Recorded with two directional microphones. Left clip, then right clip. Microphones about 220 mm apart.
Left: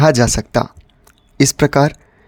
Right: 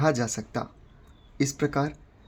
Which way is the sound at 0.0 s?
45° left (ahead or behind).